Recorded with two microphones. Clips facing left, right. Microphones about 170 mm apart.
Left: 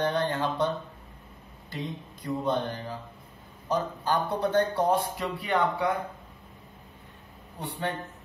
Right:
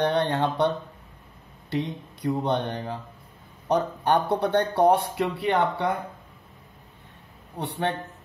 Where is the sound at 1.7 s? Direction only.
70° right (ahead or behind).